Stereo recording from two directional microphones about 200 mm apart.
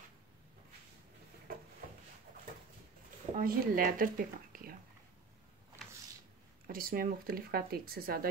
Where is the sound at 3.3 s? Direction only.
45° right (ahead or behind).